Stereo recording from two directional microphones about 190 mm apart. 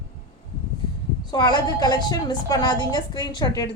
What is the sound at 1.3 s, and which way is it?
A woman's voice, 20° left (ahead or behind).